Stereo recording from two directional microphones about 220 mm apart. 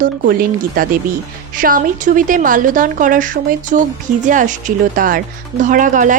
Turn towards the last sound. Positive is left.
turn(degrees=-35)  # may be behind; listen again after turning